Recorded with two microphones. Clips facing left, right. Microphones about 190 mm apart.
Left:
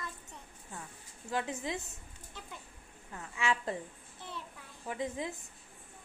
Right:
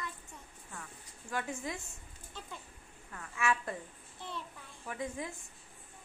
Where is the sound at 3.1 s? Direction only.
20° left (ahead or behind).